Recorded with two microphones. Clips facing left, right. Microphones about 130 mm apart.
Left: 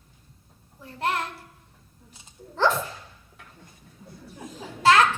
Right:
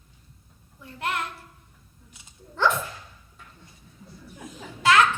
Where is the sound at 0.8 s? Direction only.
35° left (ahead or behind).